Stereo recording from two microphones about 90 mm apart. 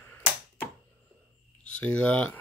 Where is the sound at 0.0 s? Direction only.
20° left (ahead or behind).